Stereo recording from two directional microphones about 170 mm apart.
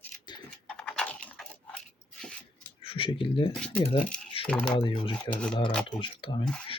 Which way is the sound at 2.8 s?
30° left (ahead or behind).